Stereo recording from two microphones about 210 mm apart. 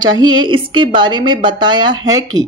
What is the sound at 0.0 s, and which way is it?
Speech, 20° right (ahead or behind).